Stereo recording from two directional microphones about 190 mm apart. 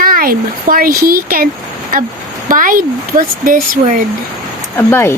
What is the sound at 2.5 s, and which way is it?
Speech, 45° right (ahead or behind).